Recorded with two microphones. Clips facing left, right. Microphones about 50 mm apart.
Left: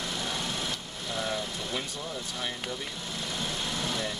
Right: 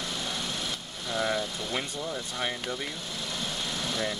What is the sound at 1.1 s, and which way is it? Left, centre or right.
Vehicle, right.